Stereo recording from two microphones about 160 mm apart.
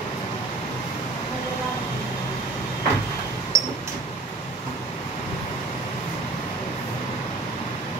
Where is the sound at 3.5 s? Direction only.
20° right (ahead or behind).